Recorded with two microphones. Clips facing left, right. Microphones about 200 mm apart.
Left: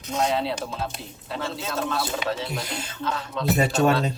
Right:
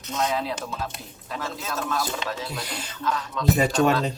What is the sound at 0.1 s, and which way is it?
A man's voice, 30° left (ahead or behind).